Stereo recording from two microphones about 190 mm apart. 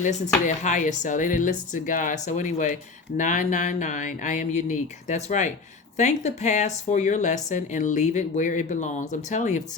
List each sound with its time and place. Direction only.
0.0 s a woman's voice: 40° left (ahead or behind)